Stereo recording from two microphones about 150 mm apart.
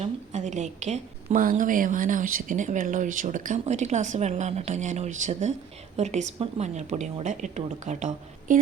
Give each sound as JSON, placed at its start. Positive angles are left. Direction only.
{"t": 0.0, "sound": "a woman's voice", "side_deg": -50}
{"t": 1.4, "sound": "a woman's voice", "side_deg": -65}